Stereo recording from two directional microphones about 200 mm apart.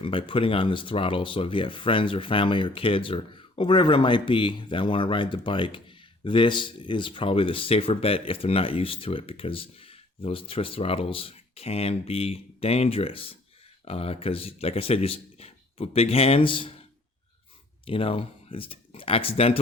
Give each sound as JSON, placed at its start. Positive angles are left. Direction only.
{"t": 0.0, "sound": "speech", "side_deg": 25}
{"t": 17.8, "sound": "speech", "side_deg": 25}